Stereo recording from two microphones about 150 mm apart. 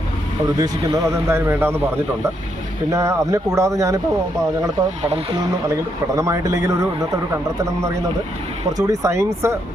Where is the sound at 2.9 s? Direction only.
20° right (ahead or behind).